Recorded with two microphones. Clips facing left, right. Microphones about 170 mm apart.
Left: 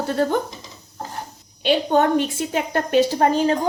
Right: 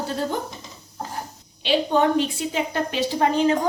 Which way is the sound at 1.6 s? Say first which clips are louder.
Left 2 dB; 50° left (ahead or behind).